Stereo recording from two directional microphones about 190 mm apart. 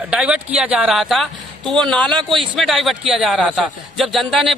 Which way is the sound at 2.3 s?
25° right (ahead or behind).